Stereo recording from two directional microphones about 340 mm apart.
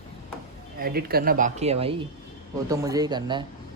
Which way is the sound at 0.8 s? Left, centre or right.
Right.